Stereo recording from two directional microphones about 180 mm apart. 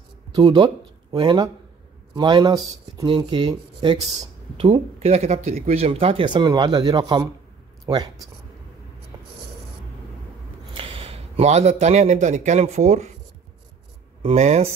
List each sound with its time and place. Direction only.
0.3 s speech: 25° right (ahead or behind)
9.1 s a sound: 25° right (ahead or behind)
10.7 s a man's voice: 30° right (ahead or behind)
14.2 s speech: 35° right (ahead or behind)